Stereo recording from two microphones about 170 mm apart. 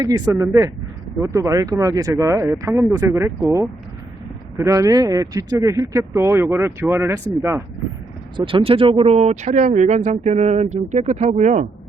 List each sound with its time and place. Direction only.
0.0 s a man's voice: 15° right (ahead or behind)
4.5 s a man's voice: 20° right (ahead or behind)
8.4 s speech: 35° right (ahead or behind)